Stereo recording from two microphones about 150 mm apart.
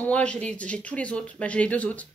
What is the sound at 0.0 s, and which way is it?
Speech, 5° left (ahead or behind).